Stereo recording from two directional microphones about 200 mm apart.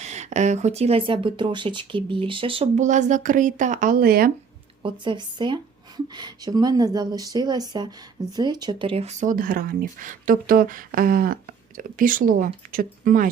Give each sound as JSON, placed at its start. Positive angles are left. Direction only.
{"t": 0.0, "sound": "speech", "side_deg": -35}
{"t": 4.8, "sound": "speech", "side_deg": -25}